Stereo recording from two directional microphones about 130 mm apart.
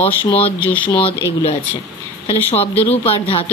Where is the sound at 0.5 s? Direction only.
10° left (ahead or behind).